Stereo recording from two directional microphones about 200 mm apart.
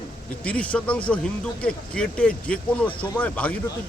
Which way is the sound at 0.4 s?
5° left (ahead or behind).